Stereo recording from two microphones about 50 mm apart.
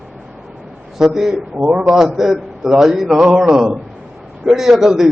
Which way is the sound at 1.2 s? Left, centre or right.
Centre.